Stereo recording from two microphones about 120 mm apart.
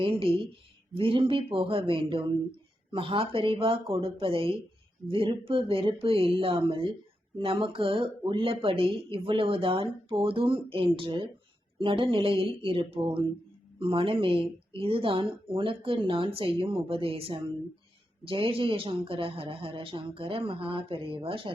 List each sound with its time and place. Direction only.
0.0 s speech: 50° right (ahead or behind)